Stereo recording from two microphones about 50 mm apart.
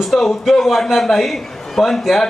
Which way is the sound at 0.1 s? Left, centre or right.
Centre.